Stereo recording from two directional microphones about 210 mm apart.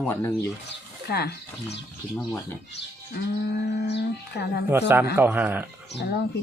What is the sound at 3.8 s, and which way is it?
Speech, 50° left (ahead or behind).